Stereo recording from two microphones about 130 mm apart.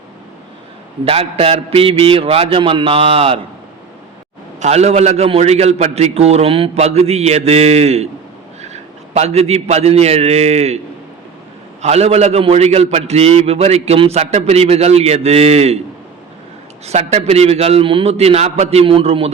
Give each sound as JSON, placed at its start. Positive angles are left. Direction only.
{"t": 1.0, "sound": "a man's voice", "side_deg": -50}
{"t": 4.6, "sound": "a man's voice", "side_deg": -55}
{"t": 11.8, "sound": "a man's voice", "side_deg": -55}
{"t": 16.8, "sound": "a man's voice", "side_deg": -55}